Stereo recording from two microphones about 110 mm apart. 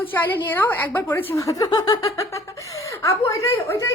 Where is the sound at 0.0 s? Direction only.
15° left (ahead or behind).